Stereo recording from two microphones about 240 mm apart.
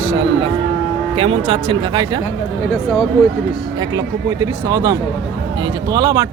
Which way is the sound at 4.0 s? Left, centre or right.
Centre.